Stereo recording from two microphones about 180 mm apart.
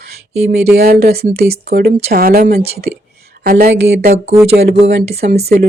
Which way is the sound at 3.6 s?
70° right (ahead or behind).